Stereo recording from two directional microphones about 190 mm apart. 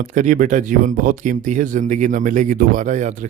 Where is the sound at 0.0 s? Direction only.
40° right (ahead or behind).